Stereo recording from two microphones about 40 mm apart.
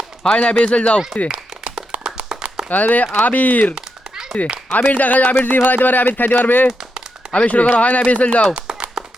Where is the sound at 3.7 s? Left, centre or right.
Centre.